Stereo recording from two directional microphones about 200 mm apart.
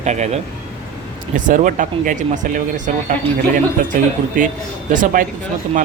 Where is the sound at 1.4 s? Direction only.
40° right (ahead or behind).